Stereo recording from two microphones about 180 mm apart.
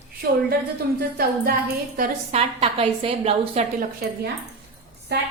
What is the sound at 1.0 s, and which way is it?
Music, 55° right (ahead or behind).